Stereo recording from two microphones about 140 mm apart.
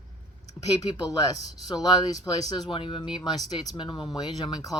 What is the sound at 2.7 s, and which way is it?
Speech, 35° left (ahead or behind).